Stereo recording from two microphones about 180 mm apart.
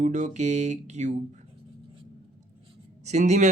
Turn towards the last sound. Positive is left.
turn(degrees=-40)  # may be behind; listen again after turning